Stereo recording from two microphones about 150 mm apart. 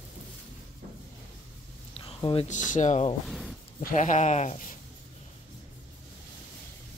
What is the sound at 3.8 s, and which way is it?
Speech, 55° left (ahead or behind).